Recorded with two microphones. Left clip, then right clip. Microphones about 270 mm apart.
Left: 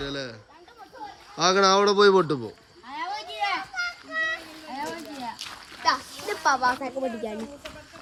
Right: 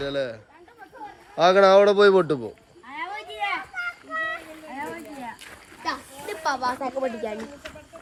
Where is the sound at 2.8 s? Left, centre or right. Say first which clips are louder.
Left 1 dB; left.